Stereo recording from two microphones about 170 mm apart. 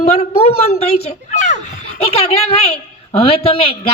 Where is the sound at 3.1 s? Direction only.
35° left (ahead or behind).